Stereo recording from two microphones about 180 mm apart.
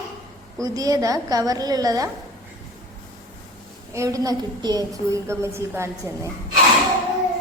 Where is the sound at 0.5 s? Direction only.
20° right (ahead or behind).